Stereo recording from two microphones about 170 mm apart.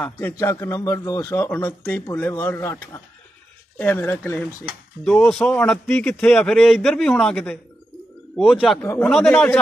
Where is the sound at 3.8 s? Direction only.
10° left (ahead or behind).